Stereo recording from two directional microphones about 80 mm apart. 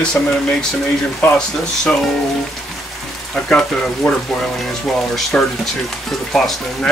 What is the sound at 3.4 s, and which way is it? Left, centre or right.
Speech, centre.